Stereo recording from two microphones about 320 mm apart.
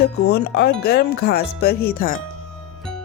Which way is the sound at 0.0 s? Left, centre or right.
Left.